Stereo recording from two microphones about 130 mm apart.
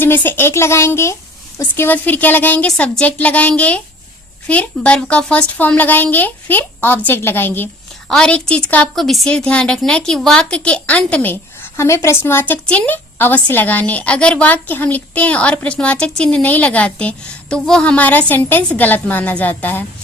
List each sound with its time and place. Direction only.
0.0 s a woman's voice: 15° left (ahead or behind)